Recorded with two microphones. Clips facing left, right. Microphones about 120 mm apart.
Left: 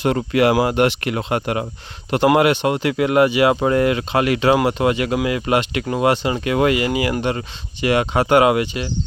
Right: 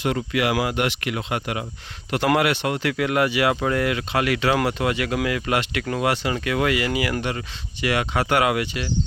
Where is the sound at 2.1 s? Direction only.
25° left (ahead or behind).